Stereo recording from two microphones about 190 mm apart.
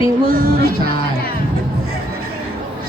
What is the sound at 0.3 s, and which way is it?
Music, 50° right (ahead or behind).